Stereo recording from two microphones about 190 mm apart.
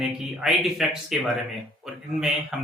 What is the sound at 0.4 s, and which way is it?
Speech, centre (ahead or behind).